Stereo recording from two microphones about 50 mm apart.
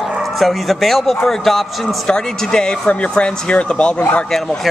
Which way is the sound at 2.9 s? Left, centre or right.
Left.